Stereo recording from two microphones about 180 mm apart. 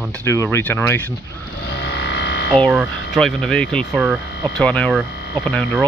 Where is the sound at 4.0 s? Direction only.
10° right (ahead or behind).